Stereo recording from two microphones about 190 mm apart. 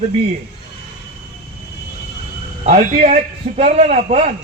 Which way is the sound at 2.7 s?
40° right (ahead or behind).